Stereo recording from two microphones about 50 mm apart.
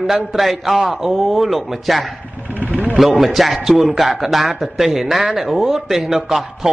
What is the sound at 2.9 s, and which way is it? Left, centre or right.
Speech, centre.